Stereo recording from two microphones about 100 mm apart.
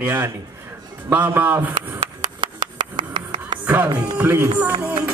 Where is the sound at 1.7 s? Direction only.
50° right (ahead or behind).